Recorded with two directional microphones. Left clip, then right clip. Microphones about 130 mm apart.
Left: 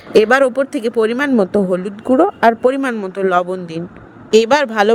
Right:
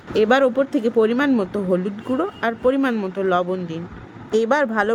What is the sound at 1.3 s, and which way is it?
Speech, 40° left (ahead or behind).